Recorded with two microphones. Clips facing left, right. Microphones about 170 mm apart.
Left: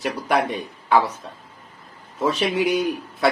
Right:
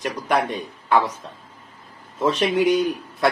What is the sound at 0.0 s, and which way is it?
A man's voice, 10° left (ahead or behind).